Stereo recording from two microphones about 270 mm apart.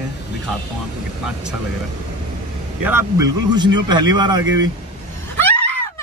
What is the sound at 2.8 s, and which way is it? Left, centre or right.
Speech, centre.